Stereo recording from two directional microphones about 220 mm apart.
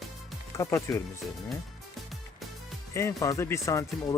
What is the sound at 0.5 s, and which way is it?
Speech, 15° left (ahead or behind).